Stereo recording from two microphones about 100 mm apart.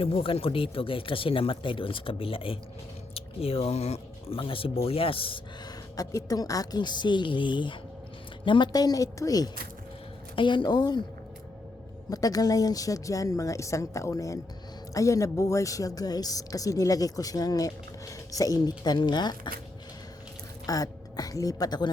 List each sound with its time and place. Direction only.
0.0 s speech: 65° left (ahead or behind)
5.6 s a woman's voice: 35° left (ahead or behind)
10.3 s a woman's voice: 50° left (ahead or behind)
12.1 s a woman's voice: 40° left (ahead or behind)
20.7 s a woman's voice: 40° left (ahead or behind)